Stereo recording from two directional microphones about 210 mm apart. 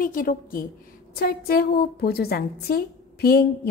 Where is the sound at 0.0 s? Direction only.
40° left (ahead or behind).